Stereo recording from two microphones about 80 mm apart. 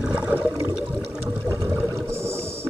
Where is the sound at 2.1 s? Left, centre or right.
Right.